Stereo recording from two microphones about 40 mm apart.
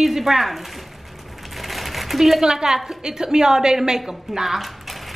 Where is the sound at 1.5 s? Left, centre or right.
Centre.